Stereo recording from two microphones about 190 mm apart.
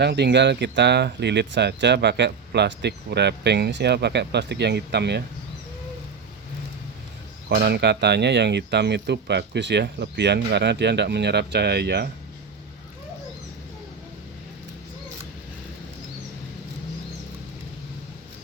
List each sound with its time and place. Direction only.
0.0 s speech: 60° right (ahead or behind)
7.5 s speech: 60° right (ahead or behind)